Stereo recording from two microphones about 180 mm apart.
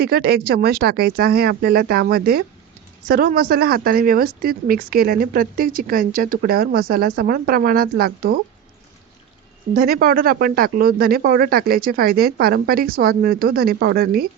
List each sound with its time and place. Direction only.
0.0 s speech: 60° right (ahead or behind)
9.8 s speech: 55° right (ahead or behind)